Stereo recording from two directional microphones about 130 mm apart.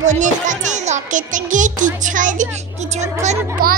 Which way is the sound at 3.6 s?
90° right.